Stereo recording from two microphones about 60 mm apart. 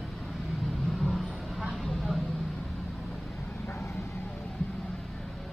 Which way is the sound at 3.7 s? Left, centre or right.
Left.